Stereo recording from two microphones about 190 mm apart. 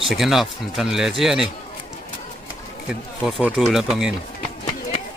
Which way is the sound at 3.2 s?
5° right (ahead or behind).